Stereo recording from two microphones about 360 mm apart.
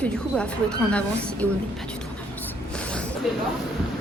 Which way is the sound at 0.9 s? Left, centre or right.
Centre.